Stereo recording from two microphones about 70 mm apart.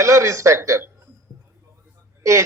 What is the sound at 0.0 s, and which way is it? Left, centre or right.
Speech, right.